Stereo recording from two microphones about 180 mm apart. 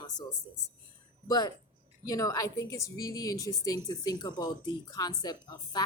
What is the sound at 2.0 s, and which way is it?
A woman's voice, 20° left (ahead or behind).